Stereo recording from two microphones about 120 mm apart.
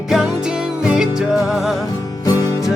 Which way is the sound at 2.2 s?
30° left (ahead or behind).